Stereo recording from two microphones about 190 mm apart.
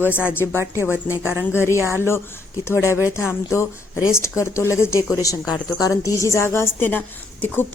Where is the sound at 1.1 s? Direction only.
15° left (ahead or behind).